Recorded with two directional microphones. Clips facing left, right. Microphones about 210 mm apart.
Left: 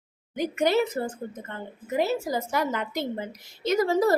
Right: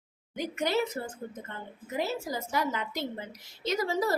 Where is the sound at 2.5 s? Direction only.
55° left (ahead or behind).